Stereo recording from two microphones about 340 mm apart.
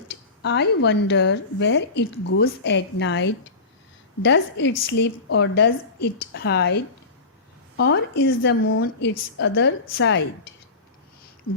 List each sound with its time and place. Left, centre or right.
0.1 s a woman's voice: left